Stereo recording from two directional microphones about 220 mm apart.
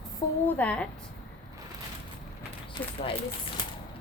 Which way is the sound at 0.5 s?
5° left (ahead or behind).